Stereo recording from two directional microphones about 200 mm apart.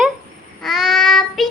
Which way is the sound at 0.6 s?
Centre (ahead or behind).